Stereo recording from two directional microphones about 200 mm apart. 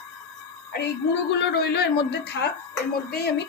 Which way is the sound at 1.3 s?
55° left (ahead or behind).